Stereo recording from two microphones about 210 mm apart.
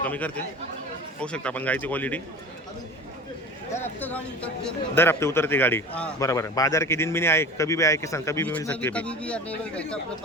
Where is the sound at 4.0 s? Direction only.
5° left (ahead or behind).